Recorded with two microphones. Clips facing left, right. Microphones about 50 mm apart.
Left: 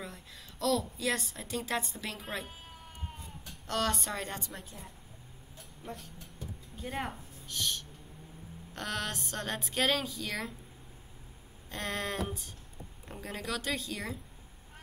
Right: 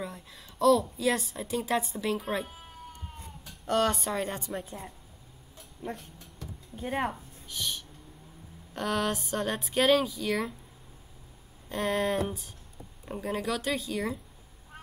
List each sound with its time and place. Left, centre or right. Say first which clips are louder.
0.0 s a woman's voice: right 5 dB; centre
3.6 s a woman's voice: right 6 dB; centre
5.8 s a woman's voice: right 6 dB; centre
6.8 s a woman's voice: right 6 dB; centre
11.7 s a woman's voice: right 7 dB; centre